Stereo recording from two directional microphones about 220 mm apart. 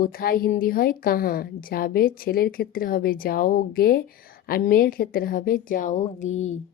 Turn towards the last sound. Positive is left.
turn(degrees=30)  # may be behind; listen again after turning